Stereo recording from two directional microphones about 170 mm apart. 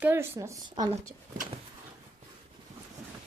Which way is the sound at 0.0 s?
15° right (ahead or behind).